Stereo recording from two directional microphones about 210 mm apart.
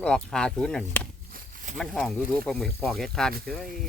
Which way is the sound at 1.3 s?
40° right (ahead or behind).